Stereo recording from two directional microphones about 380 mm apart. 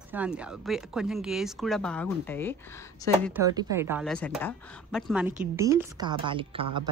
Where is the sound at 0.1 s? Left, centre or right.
Centre.